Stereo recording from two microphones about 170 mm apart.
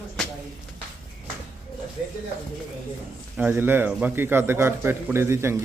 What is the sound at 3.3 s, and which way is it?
A man's voice, 10° right (ahead or behind).